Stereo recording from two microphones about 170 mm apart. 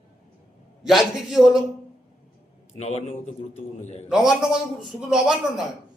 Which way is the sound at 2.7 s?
40° left (ahead or behind).